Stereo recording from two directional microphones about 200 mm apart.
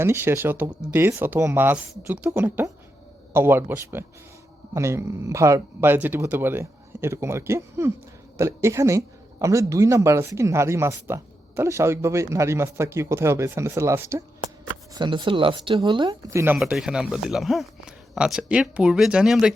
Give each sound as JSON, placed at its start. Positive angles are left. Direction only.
{"t": 0.0, "sound": "speech", "side_deg": -10}
{"t": 16.6, "sound": "speech", "side_deg": 0}